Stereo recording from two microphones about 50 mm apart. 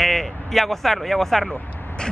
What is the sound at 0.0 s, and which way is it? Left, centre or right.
Speech, centre.